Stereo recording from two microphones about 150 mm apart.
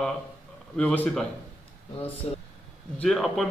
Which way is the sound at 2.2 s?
45° left (ahead or behind).